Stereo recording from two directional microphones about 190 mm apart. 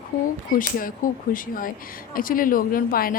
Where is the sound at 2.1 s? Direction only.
45° left (ahead or behind).